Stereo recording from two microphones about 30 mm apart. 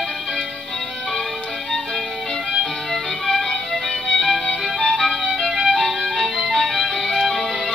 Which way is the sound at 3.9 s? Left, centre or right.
Left.